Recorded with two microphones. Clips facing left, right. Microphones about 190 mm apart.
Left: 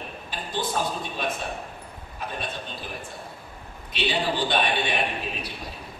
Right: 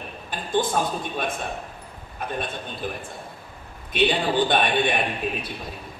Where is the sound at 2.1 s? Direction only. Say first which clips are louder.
Right 4 dB; 50° right (ahead or behind).